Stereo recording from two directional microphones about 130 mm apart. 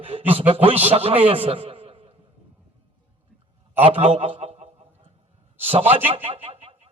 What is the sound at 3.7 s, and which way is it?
A man's voice, 45° right (ahead or behind).